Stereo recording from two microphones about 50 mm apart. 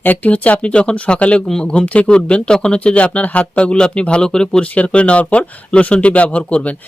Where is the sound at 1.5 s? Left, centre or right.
Centre.